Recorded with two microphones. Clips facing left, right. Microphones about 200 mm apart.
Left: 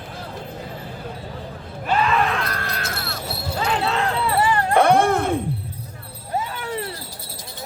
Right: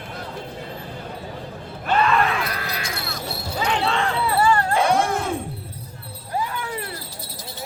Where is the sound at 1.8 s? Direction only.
Centre (ahead or behind).